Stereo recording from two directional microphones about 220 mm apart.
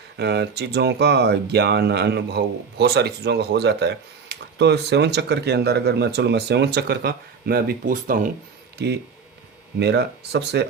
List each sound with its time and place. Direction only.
0.2 s speech: 50° right (ahead or behind)
8.8 s speech: 50° right (ahead or behind)